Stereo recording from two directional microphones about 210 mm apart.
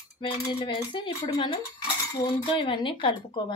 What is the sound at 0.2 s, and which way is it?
A woman's voice, 20° left (ahead or behind).